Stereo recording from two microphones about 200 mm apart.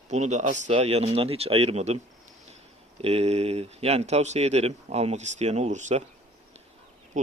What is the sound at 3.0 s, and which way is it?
Speech, 30° right (ahead or behind).